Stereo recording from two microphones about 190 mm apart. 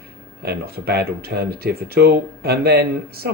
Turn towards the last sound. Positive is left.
turn(degrees=-55)  # may be behind; listen again after turning